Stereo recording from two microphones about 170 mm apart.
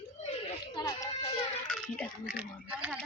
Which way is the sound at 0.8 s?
20° left (ahead or behind).